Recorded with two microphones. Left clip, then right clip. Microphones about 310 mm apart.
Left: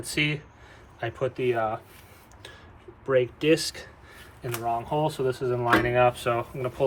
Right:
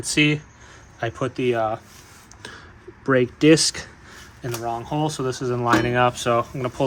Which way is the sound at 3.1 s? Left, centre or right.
Centre.